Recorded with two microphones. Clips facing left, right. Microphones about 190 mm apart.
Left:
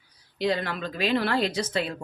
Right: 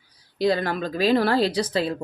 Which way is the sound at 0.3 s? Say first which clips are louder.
Right 5 dB; 40° right (ahead or behind).